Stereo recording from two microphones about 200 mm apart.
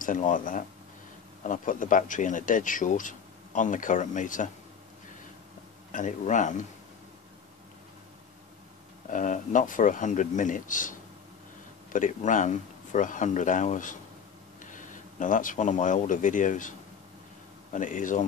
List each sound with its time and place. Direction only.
0.0 s a man's voice: 40° left (ahead or behind)
5.9 s a man's voice: 40° left (ahead or behind)
9.1 s a man's voice: 40° left (ahead or behind)
17.7 s a man's voice: 40° left (ahead or behind)